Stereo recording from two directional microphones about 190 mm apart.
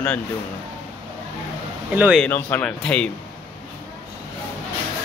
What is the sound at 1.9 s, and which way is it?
Speech, 10° right (ahead or behind).